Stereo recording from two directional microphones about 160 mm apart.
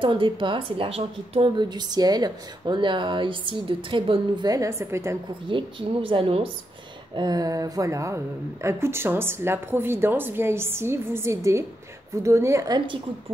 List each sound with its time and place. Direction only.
0.0 s a woman's voice: 30° right (ahead or behind)
5.5 s a woman's voice: 30° right (ahead or behind)
7.2 s a woman's voice: 25° right (ahead or behind)